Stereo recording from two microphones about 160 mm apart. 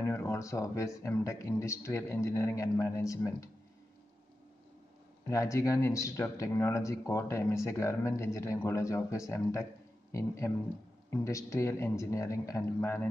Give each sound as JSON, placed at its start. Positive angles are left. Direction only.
{"t": 0.0, "sound": "speech", "side_deg": 15}
{"t": 5.3, "sound": "speech", "side_deg": 20}